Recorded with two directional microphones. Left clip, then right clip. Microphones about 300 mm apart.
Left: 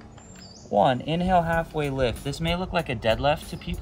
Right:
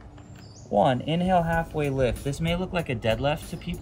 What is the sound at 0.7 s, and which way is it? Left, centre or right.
Speech, centre.